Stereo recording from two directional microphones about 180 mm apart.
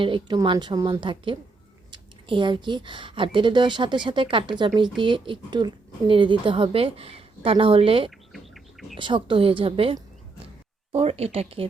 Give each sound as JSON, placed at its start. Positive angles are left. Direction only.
{"t": 0.0, "sound": "speech", "side_deg": -25}
{"t": 8.3, "sound": "bird", "side_deg": 0}
{"t": 9.0, "sound": "speech", "side_deg": -25}